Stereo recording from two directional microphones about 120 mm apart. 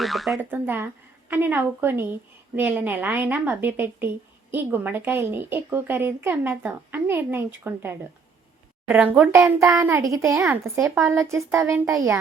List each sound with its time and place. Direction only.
0.0 s speech: centre (ahead or behind)
0.5 s a woman's voice: 15° right (ahead or behind)
9.1 s a child's voice: 20° right (ahead or behind)